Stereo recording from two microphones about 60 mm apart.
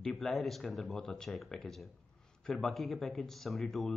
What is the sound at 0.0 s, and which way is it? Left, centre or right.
Speech, centre.